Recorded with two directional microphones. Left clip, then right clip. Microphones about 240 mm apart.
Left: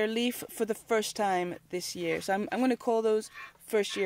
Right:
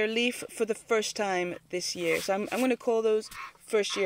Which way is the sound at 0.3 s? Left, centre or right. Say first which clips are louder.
Right 2 dB; left.